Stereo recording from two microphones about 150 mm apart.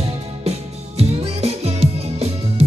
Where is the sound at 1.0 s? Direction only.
45° right (ahead or behind).